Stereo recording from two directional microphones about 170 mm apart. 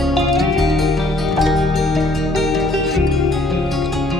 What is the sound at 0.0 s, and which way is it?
Music, centre (ahead or behind).